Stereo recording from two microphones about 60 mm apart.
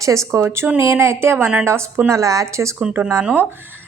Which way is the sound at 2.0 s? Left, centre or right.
Right.